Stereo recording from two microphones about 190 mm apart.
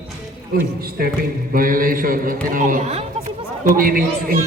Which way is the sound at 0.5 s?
50° right (ahead or behind).